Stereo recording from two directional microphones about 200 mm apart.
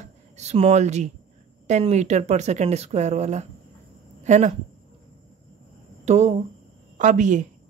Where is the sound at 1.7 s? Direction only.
35° right (ahead or behind).